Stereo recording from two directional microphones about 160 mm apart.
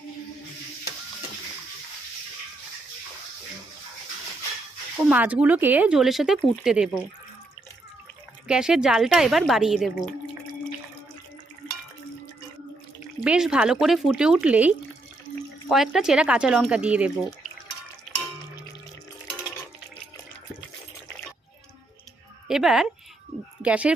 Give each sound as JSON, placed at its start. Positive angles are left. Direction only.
{"t": 5.0, "sound": "speech", "side_deg": -10}
{"t": 8.4, "sound": "speech", "side_deg": -5}
{"t": 13.2, "sound": "speech", "side_deg": -5}
{"t": 22.4, "sound": "speech", "side_deg": -5}